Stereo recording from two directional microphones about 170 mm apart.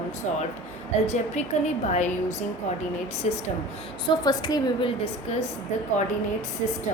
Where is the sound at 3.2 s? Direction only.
40° left (ahead or behind).